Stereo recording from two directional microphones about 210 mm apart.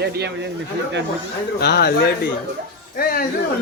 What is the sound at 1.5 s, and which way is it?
Speech, 50° left (ahead or behind).